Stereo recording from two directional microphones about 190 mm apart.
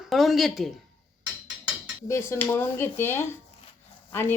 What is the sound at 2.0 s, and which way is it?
Speech, 15° left (ahead or behind).